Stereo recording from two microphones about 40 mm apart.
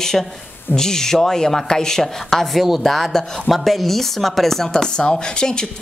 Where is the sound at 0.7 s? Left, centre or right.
Centre.